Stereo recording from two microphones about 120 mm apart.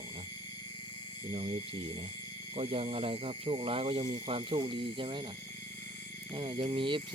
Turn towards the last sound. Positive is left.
turn(degrees=-40)  # may be behind; listen again after turning